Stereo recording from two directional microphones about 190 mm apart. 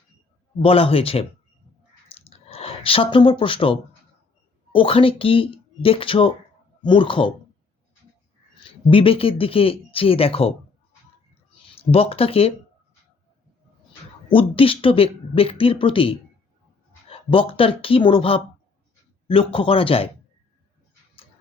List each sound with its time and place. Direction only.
0.6 s speech: 30° left (ahead or behind)
2.0 s a sound: 30° left (ahead or behind)
4.7 s speech: 30° left (ahead or behind)
8.9 s speech: 30° left (ahead or behind)
11.5 s speech: 30° left (ahead or behind)
14.3 s speech: 30° left (ahead or behind)